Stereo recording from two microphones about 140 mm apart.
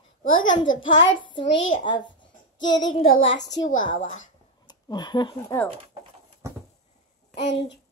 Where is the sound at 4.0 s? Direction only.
60° left (ahead or behind).